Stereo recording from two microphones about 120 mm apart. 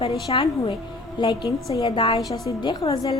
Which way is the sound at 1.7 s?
30° left (ahead or behind).